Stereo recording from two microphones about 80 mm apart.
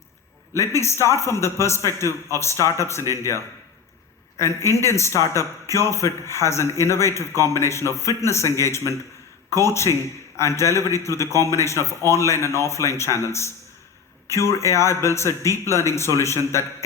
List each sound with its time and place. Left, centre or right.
0.5 s a man's voice: left